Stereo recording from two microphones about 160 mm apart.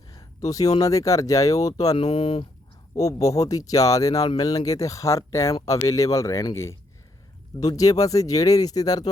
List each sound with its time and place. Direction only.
0.1 s a sound: 20° left (ahead or behind)
0.8 s speech: 20° left (ahead or behind)
2.0 s speech: 40° left (ahead or behind)
2.9 s speech: 20° left (ahead or behind)